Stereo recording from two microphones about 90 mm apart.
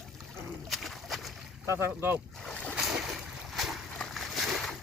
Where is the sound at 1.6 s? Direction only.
30° right (ahead or behind).